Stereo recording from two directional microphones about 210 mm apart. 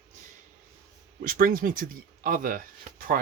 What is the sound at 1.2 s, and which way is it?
Speech, 40° right (ahead or behind).